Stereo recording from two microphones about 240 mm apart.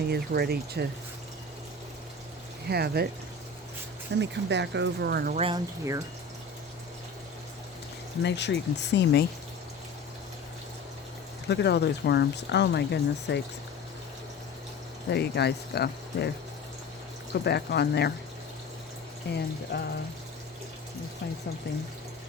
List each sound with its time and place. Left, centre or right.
0.1 s speech: right
2.6 s speech: right
4.2 s speech: right
5.4 s speech: centre
8.2 s speech: left
11.4 s speech: left
15.1 s speech: left
17.4 s speech: left
19.3 s speech: left
19.7 s music: left